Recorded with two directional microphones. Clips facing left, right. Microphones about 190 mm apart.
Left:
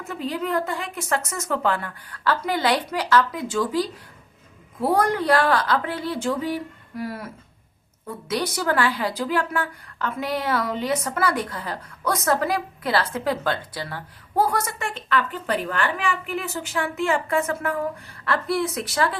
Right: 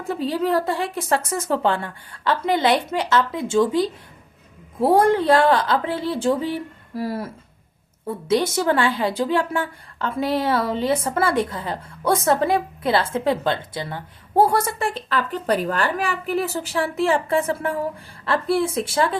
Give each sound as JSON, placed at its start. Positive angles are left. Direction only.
{"t": 0.0, "sound": "a woman's voice", "side_deg": -30}